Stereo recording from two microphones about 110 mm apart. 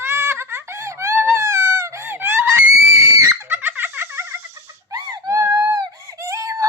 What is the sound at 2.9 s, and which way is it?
Screaming, 30° right (ahead or behind).